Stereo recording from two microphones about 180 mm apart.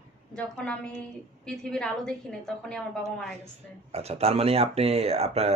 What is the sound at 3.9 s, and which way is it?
Speech, 35° right (ahead or behind).